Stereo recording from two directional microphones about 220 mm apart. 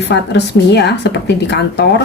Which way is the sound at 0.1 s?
50° left (ahead or behind).